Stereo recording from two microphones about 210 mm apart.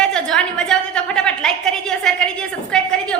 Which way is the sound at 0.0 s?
5° left (ahead or behind).